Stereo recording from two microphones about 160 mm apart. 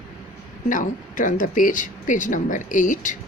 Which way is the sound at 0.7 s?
55° left (ahead or behind).